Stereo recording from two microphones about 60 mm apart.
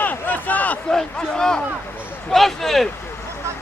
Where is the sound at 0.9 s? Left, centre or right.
Centre.